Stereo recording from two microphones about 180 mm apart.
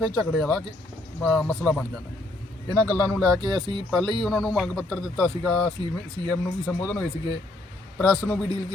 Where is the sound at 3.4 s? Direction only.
25° right (ahead or behind).